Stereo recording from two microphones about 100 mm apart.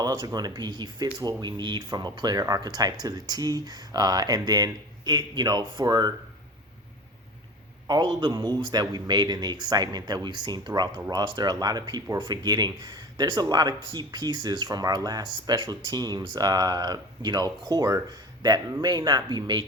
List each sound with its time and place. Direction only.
0.0 s speech: 45° right (ahead or behind)
7.9 s speech: 45° right (ahead or behind)